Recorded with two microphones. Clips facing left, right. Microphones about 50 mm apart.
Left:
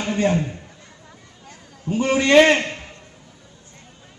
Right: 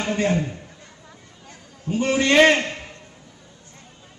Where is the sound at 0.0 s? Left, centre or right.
Left.